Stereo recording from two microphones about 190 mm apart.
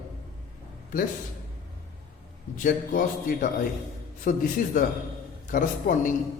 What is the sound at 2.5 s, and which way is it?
Speech, 45° left (ahead or behind).